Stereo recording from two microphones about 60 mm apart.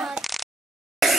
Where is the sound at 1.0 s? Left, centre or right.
Centre.